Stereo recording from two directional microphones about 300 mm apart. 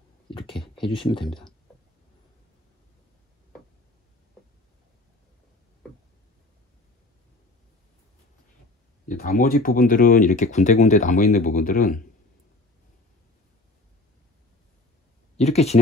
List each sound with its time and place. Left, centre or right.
0.7 s speech: centre
9.0 s speech: left
15.3 s speech: left